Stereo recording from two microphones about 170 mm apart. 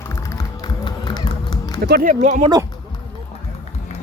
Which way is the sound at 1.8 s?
60° right (ahead or behind).